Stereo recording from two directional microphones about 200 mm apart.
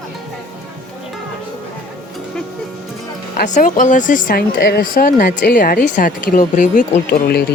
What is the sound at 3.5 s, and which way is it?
Speech, 40° left (ahead or behind).